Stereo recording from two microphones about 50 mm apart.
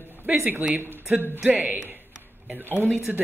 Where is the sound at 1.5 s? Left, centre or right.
Right.